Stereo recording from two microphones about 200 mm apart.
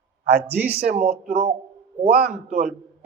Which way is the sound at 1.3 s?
45° right (ahead or behind).